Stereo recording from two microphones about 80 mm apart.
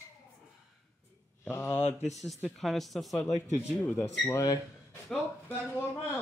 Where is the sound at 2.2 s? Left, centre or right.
Centre.